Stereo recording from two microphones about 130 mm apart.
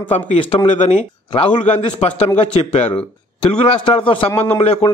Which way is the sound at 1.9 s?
50° left (ahead or behind).